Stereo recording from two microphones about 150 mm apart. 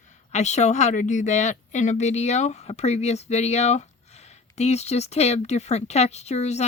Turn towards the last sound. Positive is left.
turn(degrees=45)  # may be behind; listen again after turning